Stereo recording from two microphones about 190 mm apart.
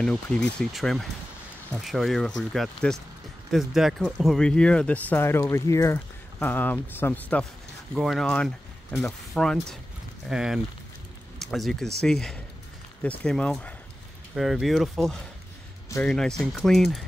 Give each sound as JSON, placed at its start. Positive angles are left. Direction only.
{"t": 0.0, "sound": "speech", "side_deg": 5}